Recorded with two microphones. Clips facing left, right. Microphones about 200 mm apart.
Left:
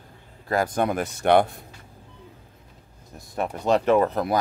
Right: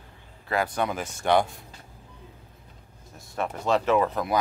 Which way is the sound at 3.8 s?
40° left (ahead or behind).